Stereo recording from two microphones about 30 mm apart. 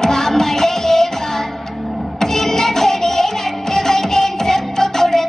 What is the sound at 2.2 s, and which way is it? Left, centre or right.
Music, centre.